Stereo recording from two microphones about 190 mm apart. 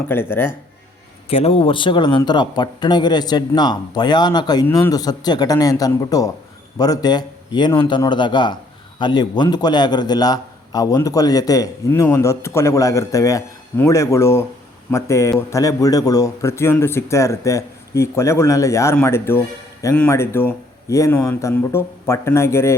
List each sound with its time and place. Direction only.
0.1 s a man's voice: 10° left (ahead or behind)
1.3 s a man's voice: 30° left (ahead or behind); by 22.7 s 15° left (ahead or behind)